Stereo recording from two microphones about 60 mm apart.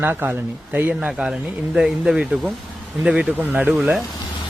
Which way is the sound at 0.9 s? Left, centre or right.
Centre.